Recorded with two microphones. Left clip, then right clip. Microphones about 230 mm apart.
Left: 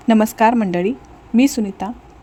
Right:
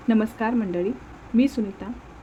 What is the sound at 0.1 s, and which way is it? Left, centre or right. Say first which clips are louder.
A woman's voice: left 10 dB; left.